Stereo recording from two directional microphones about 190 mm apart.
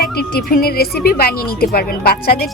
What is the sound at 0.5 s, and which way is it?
A woman's voice, 55° left (ahead or behind).